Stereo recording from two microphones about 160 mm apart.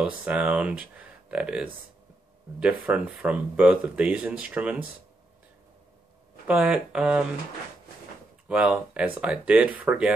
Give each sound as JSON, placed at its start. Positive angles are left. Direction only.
{"t": 0.0, "sound": "speech", "side_deg": -10}
{"t": 6.4, "sound": "speech", "side_deg": -5}
{"t": 8.5, "sound": "speech", "side_deg": -5}